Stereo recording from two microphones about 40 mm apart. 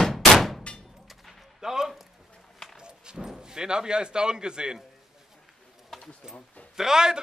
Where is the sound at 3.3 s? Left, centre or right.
Centre.